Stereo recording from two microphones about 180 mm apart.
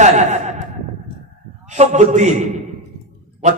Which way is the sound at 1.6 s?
40° right (ahead or behind).